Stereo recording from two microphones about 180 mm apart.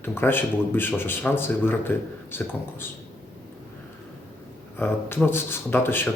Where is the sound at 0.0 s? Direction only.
10° left (ahead or behind).